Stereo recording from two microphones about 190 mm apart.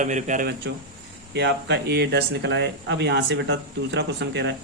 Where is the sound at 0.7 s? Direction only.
70° right (ahead or behind).